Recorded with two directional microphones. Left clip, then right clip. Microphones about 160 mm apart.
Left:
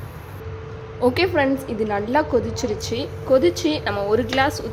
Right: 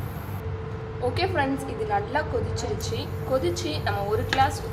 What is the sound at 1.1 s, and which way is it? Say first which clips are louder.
A woman's voice: left 6 dB; 65° left (ahead or behind).